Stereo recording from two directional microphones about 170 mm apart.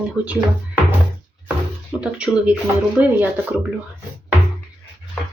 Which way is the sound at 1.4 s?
5° right (ahead or behind).